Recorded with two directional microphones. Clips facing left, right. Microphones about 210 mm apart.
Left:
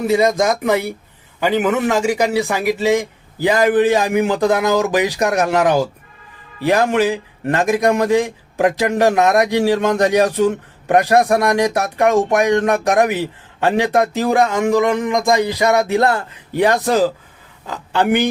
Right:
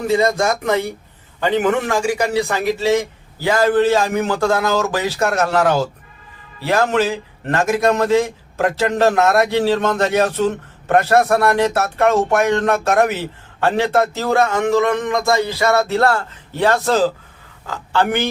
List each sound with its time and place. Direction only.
0.1 s a man's voice: 10° left (ahead or behind)
1.9 s a man's voice: 20° left (ahead or behind)